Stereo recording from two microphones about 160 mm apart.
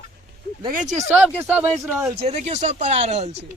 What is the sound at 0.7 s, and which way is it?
Speech, 50° right (ahead or behind).